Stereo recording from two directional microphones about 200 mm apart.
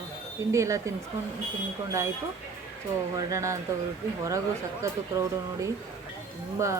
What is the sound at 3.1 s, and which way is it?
Speech, 15° right (ahead or behind).